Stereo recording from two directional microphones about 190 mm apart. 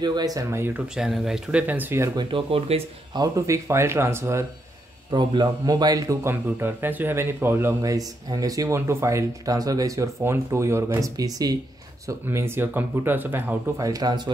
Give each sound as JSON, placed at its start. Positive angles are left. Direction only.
{"t": 0.0, "sound": "a man's voice", "side_deg": -20}
{"t": 2.1, "sound": "a man's voice", "side_deg": -30}